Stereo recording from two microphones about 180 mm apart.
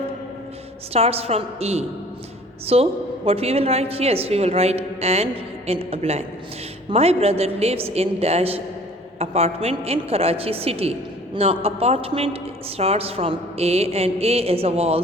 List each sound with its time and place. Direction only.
0.9 s a woman's voice: 35° right (ahead or behind)